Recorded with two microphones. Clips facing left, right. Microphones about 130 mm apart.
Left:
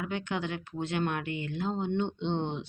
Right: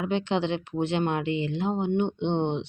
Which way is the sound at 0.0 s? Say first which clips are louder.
Right 7 dB; 25° right (ahead or behind).